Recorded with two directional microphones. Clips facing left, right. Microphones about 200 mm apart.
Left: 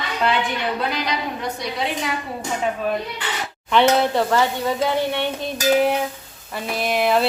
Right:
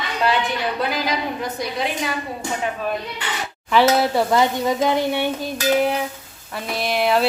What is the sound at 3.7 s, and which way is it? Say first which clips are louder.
Speech: even; 10° right (ahead or behind).